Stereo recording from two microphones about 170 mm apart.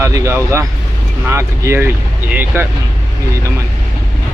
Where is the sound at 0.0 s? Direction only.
15° right (ahead or behind).